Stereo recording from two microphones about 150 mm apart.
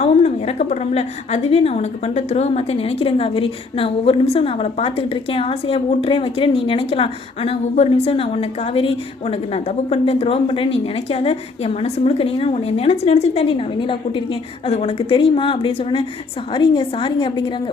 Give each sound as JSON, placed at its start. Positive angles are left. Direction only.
{"t": 0.0, "sound": "a woman's voice", "side_deg": 45}